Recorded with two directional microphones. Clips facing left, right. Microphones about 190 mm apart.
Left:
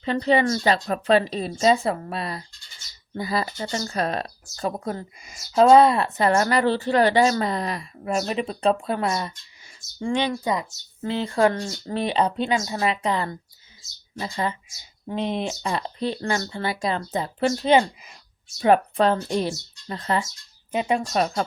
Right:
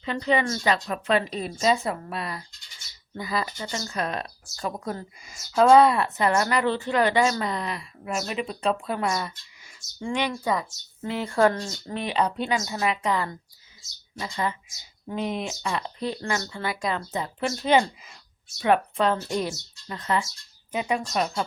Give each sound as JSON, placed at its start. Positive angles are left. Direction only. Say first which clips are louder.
{"t": 0.0, "sound": "speech", "louder": "left 4 dB", "side_deg": 35}
{"t": 18.6, "sound": "speech", "louder": "left 4 dB", "side_deg": 35}
{"t": 21.1, "sound": "speech", "louder": "left 3 dB", "side_deg": 40}